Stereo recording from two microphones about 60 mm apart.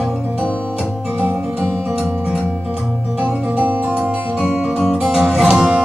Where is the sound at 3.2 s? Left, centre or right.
Right.